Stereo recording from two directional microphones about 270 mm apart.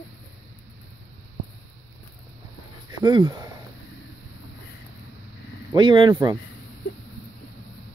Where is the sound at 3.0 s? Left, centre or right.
Centre.